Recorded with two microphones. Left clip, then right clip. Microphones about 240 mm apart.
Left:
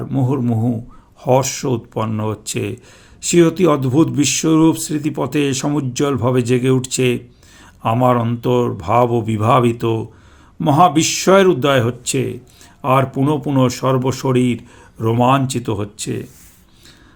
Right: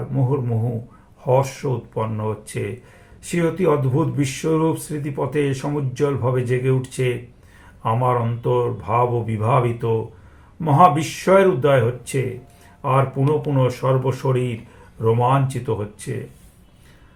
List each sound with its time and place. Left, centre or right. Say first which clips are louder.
1.4 s speech: left 3 dB; left